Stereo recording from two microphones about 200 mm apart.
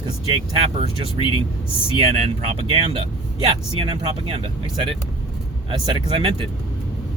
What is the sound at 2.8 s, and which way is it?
Speech, 25° right (ahead or behind).